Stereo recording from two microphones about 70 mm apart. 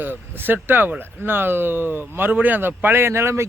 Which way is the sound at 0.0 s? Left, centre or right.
Right.